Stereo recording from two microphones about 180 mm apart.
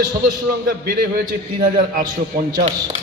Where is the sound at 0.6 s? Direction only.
55° right (ahead or behind).